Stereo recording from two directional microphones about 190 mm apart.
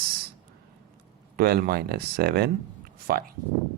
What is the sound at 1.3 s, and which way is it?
Speech, 55° right (ahead or behind).